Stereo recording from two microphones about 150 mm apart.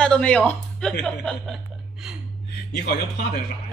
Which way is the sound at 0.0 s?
5° left (ahead or behind).